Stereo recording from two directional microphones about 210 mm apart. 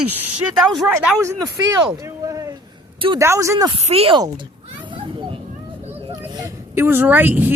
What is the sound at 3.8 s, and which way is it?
Children playing, 30° right (ahead or behind).